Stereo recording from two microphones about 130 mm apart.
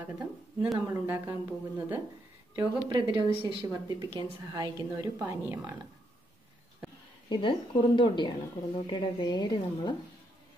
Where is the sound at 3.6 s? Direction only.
25° right (ahead or behind).